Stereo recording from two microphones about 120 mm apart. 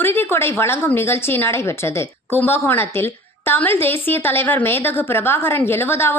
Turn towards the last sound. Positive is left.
turn(degrees=20)  # may be behind; listen again after turning